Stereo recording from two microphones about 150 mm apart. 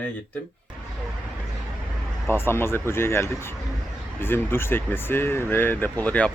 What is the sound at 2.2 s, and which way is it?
Speech, 15° left (ahead or behind).